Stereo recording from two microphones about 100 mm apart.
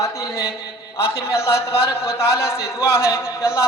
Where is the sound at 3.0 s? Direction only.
30° left (ahead or behind).